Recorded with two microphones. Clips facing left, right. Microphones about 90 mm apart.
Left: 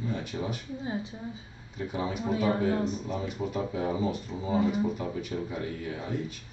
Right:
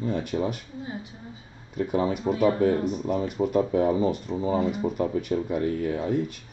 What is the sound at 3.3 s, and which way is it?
Speech, 50° right (ahead or behind).